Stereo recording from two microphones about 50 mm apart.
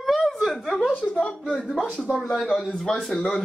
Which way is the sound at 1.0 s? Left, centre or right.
Left.